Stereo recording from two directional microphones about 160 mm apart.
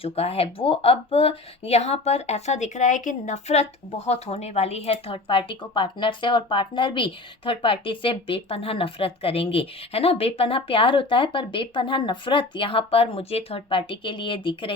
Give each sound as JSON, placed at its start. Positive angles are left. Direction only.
{"t": 0.0, "sound": "speech", "side_deg": 40}